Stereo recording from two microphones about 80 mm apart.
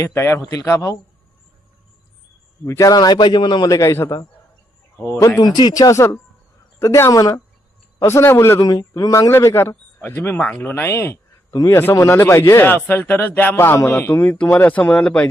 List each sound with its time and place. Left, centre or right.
0.0 s a man's voice: left
2.6 s a man's voice: left
2.9 s a man's voice: left
3.8 s a man's voice: left
5.1 s a man's voice: left
5.4 s a man's voice: left
5.9 s a man's voice: left
7.1 s speech: left
7.9 s a man's voice: left
8.5 s speech: left
9.6 s a man's voice: left